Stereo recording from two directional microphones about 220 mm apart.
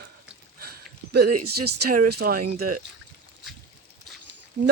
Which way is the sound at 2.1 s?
45° right (ahead or behind).